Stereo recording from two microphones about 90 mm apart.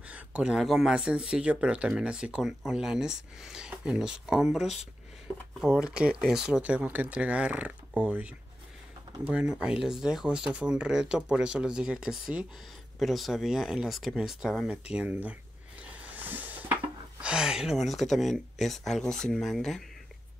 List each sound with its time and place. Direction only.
0.1 s speech: 15° right (ahead or behind)
14.7 s speech: 15° right (ahead or behind)
16.2 s a sound: 20° right (ahead or behind)
17.2 s speech: 10° right (ahead or behind)